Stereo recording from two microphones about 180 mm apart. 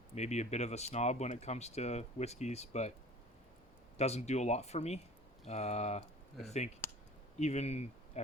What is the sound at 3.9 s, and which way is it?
Speech, 35° left (ahead or behind).